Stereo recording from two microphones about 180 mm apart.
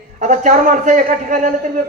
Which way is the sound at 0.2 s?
45° right (ahead or behind).